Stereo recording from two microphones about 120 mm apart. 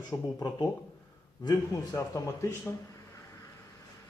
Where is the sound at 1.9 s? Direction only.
25° left (ahead or behind).